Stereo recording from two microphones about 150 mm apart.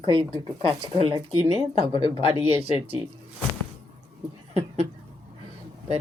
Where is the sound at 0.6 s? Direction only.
40° right (ahead or behind).